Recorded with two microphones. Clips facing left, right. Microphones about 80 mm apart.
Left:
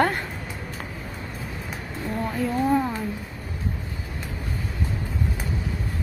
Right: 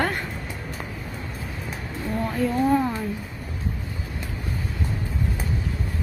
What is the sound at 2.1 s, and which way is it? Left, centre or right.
Speech, centre.